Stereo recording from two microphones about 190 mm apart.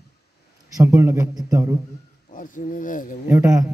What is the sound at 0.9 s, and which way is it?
Speech, 15° right (ahead or behind).